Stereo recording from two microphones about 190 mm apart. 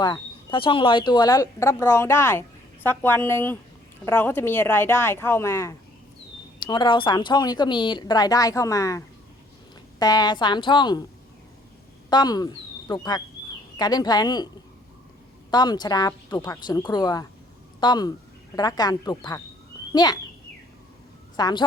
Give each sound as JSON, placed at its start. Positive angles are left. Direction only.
{"t": 0.0, "sound": "a woman's voice", "side_deg": 25}
{"t": 12.1, "sound": "a woman's voice", "side_deg": 20}
{"t": 21.3, "sound": "speech", "side_deg": 20}